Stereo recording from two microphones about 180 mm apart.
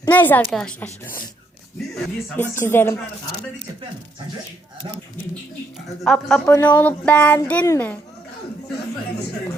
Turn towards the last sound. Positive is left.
turn(degrees=10)  # may be behind; listen again after turning